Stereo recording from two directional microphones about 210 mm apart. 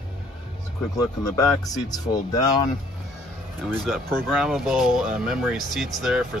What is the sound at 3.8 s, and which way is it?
Speech, centre (ahead or behind).